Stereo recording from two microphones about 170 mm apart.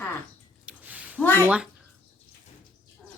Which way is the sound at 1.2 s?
10° left (ahead or behind).